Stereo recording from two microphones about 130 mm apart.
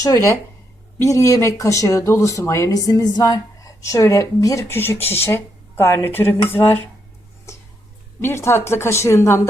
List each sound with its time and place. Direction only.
0.0 s speech: 25° left (ahead or behind)
8.2 s speech: 20° left (ahead or behind)